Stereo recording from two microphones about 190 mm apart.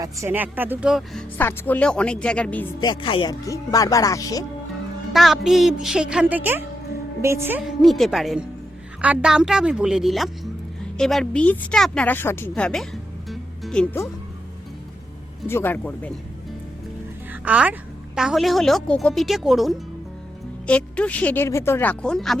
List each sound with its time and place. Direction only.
0.0 s speech: 15° right (ahead or behind)
1.4 s speech: 10° left (ahead or behind)
2.8 s speech: 25° left (ahead or behind)
5.1 s a woman's voice: centre (ahead or behind)
7.8 s a woman's voice: centre (ahead or behind)
15.4 s speech: 10° left (ahead or behind)
17.4 s a woman's voice: 5° right (ahead or behind)